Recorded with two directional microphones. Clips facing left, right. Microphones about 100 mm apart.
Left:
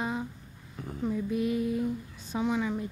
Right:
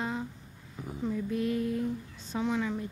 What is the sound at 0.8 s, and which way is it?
Speech, 10° right (ahead or behind).